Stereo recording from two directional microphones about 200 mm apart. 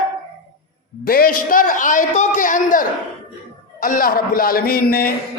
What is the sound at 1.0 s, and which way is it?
A man's voice, 50° left (ahead or behind).